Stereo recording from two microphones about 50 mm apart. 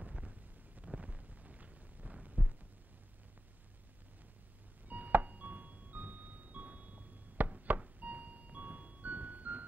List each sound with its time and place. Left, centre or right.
0.0 s wind noise: right
0.9 s a sound: right
4.8 s music: right